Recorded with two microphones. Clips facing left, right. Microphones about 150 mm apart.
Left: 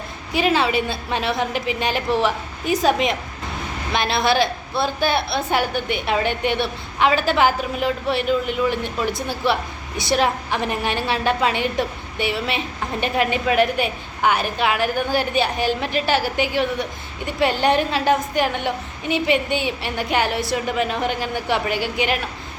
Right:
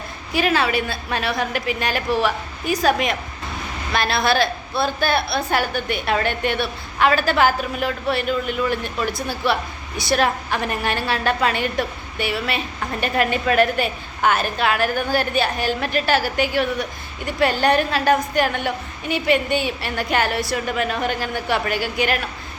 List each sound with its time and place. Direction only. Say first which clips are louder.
0.3 s a woman's voice: left 1 dB; 20° left (ahead or behind)